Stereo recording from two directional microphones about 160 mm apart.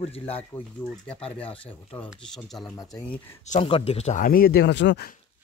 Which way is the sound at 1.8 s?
5° left (ahead or behind).